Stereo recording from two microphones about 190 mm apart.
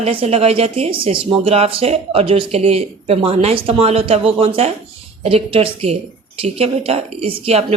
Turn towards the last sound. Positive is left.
turn(degrees=-30)  # may be behind; listen again after turning